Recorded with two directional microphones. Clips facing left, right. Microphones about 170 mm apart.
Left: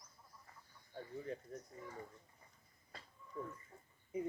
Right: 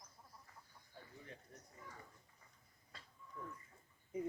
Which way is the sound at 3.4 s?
30° left (ahead or behind).